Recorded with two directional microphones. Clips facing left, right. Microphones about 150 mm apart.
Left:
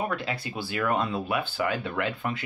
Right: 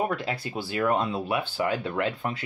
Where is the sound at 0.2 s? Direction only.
45° right (ahead or behind).